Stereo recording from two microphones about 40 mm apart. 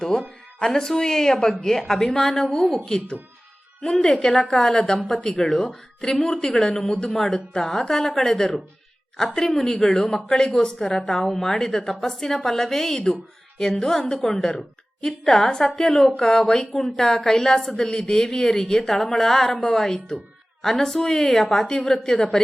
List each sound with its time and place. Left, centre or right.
0.7 s a woman's voice: centre
4.1 s a woman's voice: centre
4.9 s a woman's voice: centre